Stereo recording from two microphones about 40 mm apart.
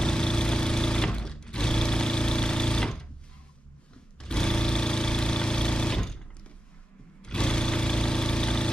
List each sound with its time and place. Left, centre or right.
0.0 s sewing machine: centre
4.2 s engine: centre
7.2 s vehicle: left